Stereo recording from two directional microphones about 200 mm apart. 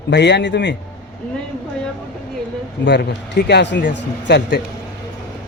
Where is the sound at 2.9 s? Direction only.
60° left (ahead or behind).